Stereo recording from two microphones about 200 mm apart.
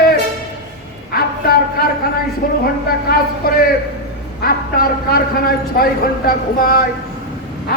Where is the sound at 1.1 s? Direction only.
50° left (ahead or behind).